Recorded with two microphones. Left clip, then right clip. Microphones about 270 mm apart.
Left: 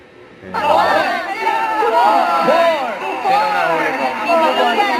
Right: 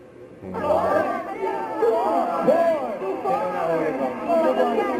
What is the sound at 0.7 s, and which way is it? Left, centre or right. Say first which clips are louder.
Chatter: left 7 dB; centre.